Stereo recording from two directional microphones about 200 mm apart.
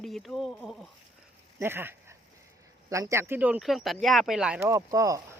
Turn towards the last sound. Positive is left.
turn(degrees=-15)  # may be behind; listen again after turning